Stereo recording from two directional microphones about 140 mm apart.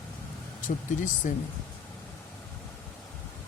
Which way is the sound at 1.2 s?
65° left (ahead or behind).